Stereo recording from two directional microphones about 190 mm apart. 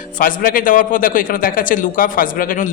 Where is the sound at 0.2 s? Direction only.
45° left (ahead or behind).